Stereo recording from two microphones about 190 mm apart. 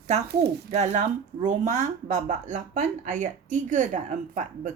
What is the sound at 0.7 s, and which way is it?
Speech, 35° right (ahead or behind).